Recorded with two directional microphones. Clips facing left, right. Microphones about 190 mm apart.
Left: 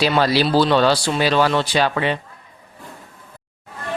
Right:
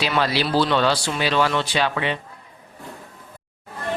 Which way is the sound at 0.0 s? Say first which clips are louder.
Left 5 dB; 40° left (ahead or behind).